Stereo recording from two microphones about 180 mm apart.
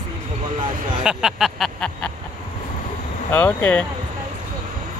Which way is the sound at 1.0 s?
Centre (ahead or behind).